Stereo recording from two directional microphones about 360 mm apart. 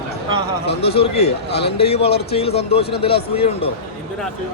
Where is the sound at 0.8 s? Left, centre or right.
Centre.